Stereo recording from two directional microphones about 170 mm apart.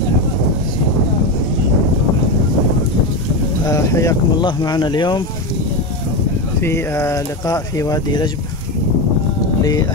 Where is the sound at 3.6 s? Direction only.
20° left (ahead or behind).